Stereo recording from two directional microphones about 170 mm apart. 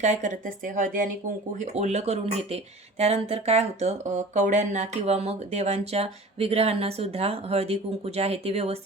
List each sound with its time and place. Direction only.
0.0 s a woman's voice: 45° right (ahead or behind)